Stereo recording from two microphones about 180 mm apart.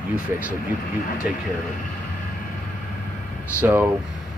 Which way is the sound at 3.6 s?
10° right (ahead or behind).